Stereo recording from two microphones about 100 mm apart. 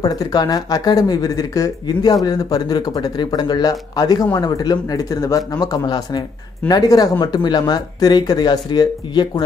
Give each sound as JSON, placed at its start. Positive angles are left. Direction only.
{"t": 0.0, "sound": "speech", "side_deg": 40}